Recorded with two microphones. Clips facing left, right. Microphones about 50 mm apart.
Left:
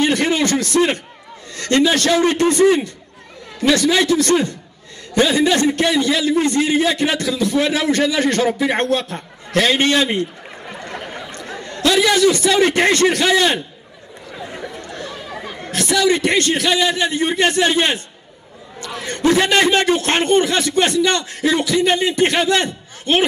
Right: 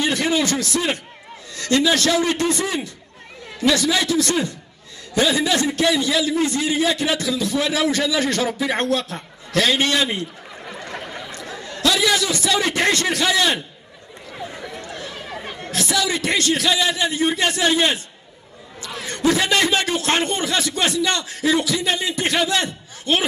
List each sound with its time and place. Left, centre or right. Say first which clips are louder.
0.0 s a sound: left 3 dB; left
1.5 s a man's voice: left 3 dB; left
11.3 s chatter: left 2 dB; left
12.1 s a man's voice: left 5 dB; left
12.6 s speech: left 4 dB; left
12.9 s a man's voice: left 5 dB; left
15.7 s a man's voice: left 6 dB; left